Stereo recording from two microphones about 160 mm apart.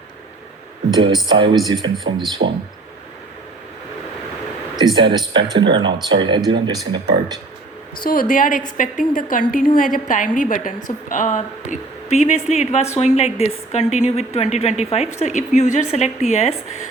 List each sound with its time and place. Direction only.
0.9 s speech: 25° right (ahead or behind)
2.4 s speech: 60° right (ahead or behind)
4.9 s speech: 30° right (ahead or behind)
8.0 s a woman's voice: 60° left (ahead or behind); by 16.9 s 45° left (ahead or behind)